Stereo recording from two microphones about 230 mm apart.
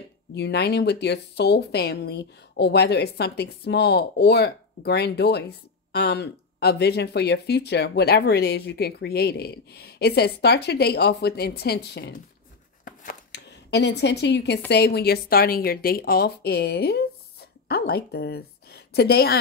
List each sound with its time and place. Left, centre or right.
0.3 s speech: left
12.8 s a sound: left
14.7 s a woman's voice: left